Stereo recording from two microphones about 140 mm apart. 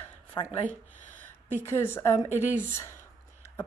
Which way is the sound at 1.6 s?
15° left (ahead or behind).